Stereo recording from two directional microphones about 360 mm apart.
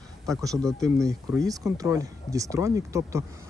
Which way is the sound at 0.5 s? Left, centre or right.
Centre.